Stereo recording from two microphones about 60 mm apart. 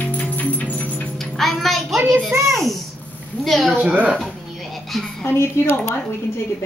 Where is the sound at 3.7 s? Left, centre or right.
Right.